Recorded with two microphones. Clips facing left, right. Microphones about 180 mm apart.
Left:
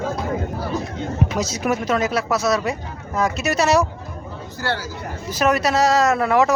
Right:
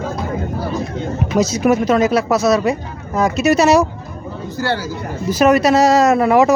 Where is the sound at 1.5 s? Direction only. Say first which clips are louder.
Right 7 dB; 20° right (ahead or behind).